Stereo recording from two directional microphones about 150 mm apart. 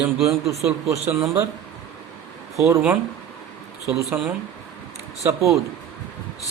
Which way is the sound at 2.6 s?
15° right (ahead or behind).